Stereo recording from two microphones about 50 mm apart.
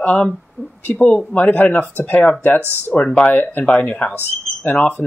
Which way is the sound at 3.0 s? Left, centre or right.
Centre.